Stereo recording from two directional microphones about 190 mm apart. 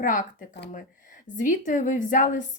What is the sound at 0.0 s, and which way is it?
Speech, 45° left (ahead or behind).